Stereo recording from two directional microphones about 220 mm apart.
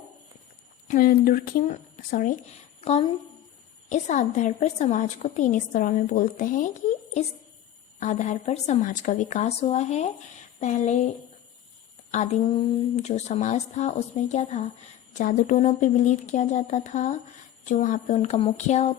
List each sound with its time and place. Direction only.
0.9 s a woman's voice: 40° left (ahead or behind)
2.8 s a woman's voice: 30° left (ahead or behind)
7.9 s a woman's voice: 35° left (ahead or behind)
12.1 s a woman's voice: 30° left (ahead or behind)